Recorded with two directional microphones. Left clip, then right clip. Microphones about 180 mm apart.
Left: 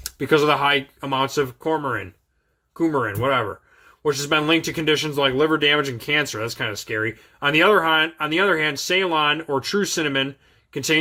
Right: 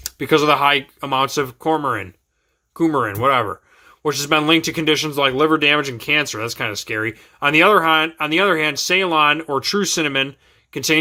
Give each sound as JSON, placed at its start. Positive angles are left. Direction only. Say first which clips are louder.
{"t": 0.0, "sound": "speech", "louder": "right 2 dB", "side_deg": -15}